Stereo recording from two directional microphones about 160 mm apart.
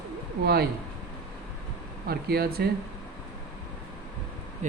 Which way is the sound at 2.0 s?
75° right (ahead or behind).